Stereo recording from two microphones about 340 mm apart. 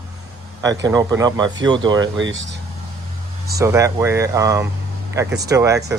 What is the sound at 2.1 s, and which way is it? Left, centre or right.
Speech, right.